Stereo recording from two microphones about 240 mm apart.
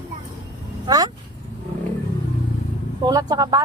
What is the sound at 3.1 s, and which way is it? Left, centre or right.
Speech, centre.